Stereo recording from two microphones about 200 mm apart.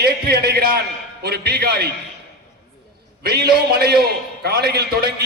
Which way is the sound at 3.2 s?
55° right (ahead or behind).